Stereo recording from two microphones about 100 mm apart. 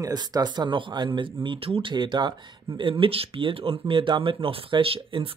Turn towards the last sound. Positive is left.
turn(degrees=-65)  # may be behind; listen again after turning